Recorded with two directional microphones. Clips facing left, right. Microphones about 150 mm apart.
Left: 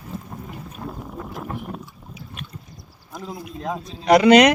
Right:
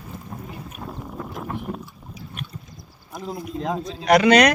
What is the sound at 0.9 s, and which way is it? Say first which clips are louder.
Clip-clop: even; centre (ahead or behind).